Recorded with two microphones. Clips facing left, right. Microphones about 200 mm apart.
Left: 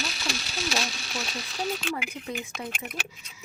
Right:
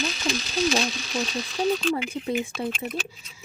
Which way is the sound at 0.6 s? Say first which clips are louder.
Right 8 dB; 40° right (ahead or behind).